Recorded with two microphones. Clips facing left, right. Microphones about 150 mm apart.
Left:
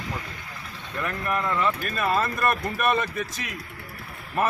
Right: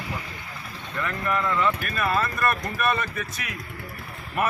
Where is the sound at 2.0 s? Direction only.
25° left (ahead or behind).